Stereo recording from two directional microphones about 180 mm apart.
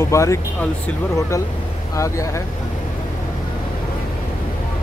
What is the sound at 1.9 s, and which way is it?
Speech, 15° left (ahead or behind).